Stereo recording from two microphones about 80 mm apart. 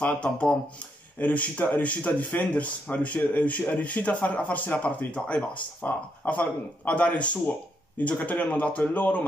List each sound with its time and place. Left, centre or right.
0.0 s speech: centre